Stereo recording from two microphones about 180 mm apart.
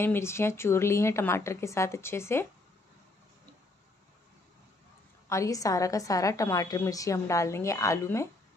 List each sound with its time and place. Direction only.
0.0 s a woman's voice: 15° left (ahead or behind)
5.3 s a woman's voice: 20° left (ahead or behind)